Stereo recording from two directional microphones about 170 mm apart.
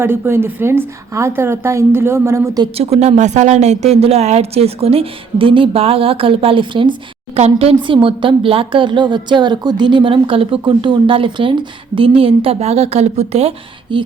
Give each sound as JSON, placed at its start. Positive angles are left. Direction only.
{"t": 0.0, "sound": "a woman's voice", "side_deg": -15}
{"t": 2.7, "sound": "speech", "side_deg": -40}
{"t": 13.9, "sound": "speech", "side_deg": -25}